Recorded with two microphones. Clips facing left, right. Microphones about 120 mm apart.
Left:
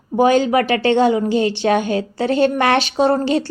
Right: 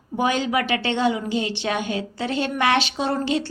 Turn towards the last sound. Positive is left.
turn(degrees=40)  # may be behind; listen again after turning